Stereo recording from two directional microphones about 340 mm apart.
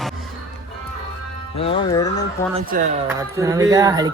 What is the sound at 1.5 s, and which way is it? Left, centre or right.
Speech, centre.